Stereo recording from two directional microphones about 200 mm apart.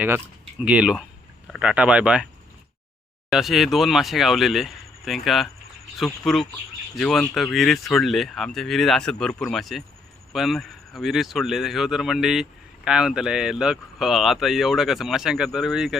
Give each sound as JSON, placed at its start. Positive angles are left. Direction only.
{"t": 0.6, "sound": "speech", "side_deg": -5}
{"t": 3.2, "sound": "speech", "side_deg": 0}